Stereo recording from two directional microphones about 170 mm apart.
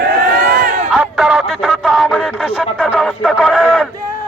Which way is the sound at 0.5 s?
55° right (ahead or behind).